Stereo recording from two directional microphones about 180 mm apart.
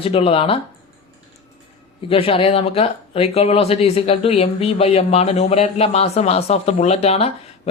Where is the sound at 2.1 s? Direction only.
30° left (ahead or behind).